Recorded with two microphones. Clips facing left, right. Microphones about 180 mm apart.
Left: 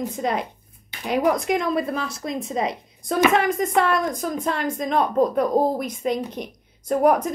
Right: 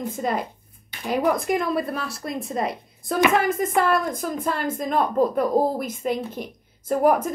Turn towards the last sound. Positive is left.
turn(degrees=-5)  # may be behind; listen again after turning